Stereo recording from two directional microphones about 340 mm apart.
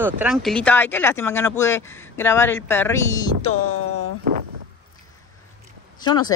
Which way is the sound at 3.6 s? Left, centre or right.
Left.